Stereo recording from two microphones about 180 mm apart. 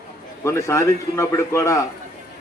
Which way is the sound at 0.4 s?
15° left (ahead or behind).